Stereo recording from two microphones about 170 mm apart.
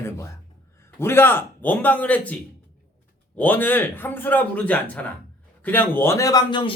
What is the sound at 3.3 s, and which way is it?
A man's voice, 10° left (ahead or behind).